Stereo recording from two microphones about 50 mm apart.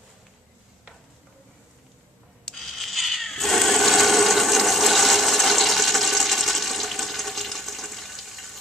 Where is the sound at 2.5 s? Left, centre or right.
Centre.